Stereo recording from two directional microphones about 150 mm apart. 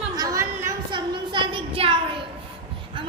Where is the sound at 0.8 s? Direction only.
30° right (ahead or behind).